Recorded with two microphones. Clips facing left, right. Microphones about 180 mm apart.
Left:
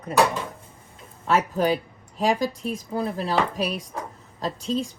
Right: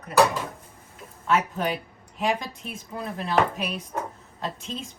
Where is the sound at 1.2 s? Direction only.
35° left (ahead or behind).